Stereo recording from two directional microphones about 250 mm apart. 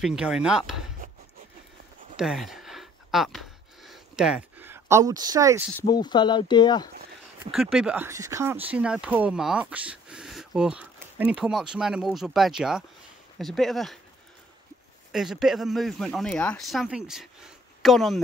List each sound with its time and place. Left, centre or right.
0.0 s speech: centre
2.1 s a sound: centre
5.8 s speech: centre
7.5 s speech: centre
15.1 s speech: centre